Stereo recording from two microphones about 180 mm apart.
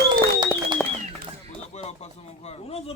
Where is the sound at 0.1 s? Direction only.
25° right (ahead or behind).